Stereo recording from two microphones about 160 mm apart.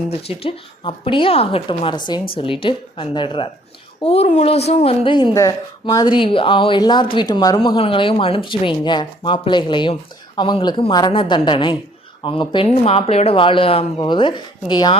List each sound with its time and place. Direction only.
0.1 s a woman's voice: 40° left (ahead or behind)
12.7 s a woman's voice: 45° left (ahead or behind); by 14.9 s 30° left (ahead or behind)